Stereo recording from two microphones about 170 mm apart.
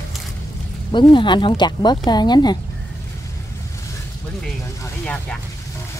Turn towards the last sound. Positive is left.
turn(degrees=5)  # may be behind; listen again after turning